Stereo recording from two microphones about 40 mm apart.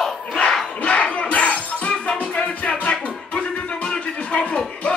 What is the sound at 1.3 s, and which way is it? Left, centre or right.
Music, left.